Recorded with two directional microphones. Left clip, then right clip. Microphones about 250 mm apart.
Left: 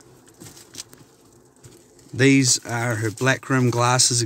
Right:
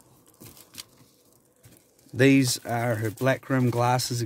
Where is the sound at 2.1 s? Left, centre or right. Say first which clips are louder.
Left 3 dB; right.